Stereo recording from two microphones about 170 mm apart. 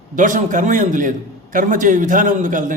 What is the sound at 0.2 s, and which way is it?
A man's voice, 50° right (ahead or behind).